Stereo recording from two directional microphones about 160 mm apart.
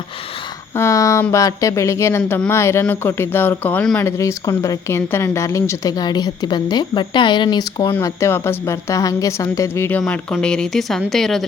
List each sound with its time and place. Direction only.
0.8 s speech: 20° left (ahead or behind)
7.9 s speech: 15° left (ahead or behind)
10.0 s speech: 5° left (ahead or behind)